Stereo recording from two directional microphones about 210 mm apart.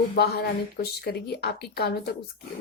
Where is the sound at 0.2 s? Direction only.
50° left (ahead or behind).